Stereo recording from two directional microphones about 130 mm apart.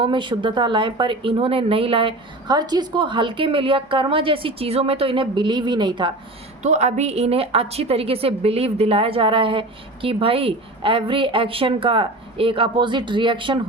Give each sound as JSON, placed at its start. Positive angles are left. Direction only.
{"t": 0.0, "sound": "speech", "side_deg": -40}
{"t": 6.6, "sound": "a woman's voice", "side_deg": -60}